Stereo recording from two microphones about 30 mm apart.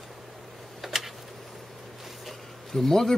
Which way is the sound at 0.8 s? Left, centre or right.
Centre.